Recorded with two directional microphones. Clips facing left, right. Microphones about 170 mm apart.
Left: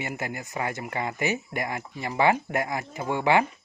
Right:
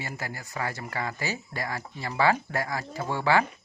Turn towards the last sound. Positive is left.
turn(degrees=20)  # may be behind; listen again after turning